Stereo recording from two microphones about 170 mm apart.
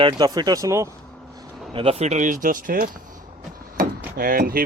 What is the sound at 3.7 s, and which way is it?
Door, 60° right (ahead or behind).